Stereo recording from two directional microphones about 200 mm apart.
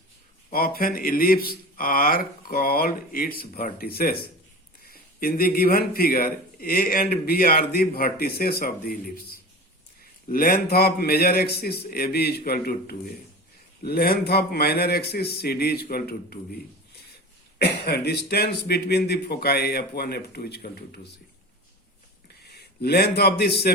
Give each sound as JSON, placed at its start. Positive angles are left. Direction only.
{"t": 0.5, "sound": "a man's voice", "side_deg": 45}
{"t": 10.2, "sound": "a man's voice", "side_deg": 45}
{"t": 17.6, "sound": "a man's voice", "side_deg": 55}
{"t": 22.4, "sound": "a man's voice", "side_deg": 50}